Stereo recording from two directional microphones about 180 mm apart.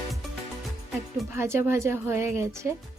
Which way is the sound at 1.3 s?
15° right (ahead or behind).